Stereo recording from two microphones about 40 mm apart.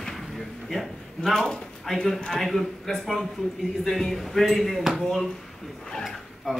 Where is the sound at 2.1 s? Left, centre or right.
Centre.